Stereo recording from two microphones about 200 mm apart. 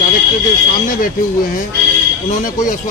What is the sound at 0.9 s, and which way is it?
Speech, 45° left (ahead or behind).